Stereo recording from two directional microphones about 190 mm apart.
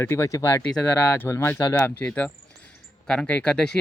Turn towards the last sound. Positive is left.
turn(degrees=5)  # may be behind; listen again after turning